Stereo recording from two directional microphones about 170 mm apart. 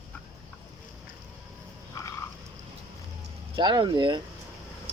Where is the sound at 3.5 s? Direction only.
30° right (ahead or behind).